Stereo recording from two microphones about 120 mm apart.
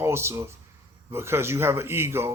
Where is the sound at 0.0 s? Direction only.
20° right (ahead or behind).